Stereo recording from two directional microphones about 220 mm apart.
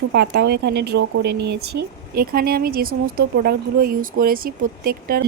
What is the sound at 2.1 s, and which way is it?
Speech, 45° right (ahead or behind).